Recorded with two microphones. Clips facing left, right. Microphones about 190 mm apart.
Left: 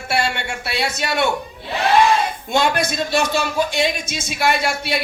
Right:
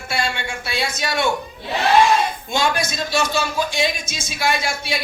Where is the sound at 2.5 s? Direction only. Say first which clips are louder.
Left 4 dB; 60° left (ahead or behind).